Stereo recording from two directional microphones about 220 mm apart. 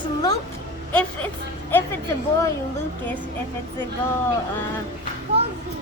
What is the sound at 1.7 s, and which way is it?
Speech, 10° left (ahead or behind).